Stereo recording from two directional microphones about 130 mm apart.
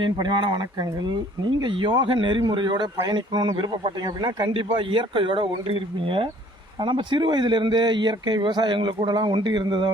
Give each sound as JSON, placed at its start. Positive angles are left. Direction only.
{"t": 0.0, "sound": "speech", "side_deg": -35}